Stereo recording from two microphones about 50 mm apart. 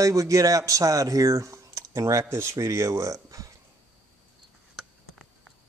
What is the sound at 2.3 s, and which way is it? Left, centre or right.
Speech, right.